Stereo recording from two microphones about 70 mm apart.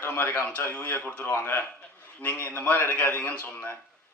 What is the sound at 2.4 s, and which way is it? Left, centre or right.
A man's voice, left.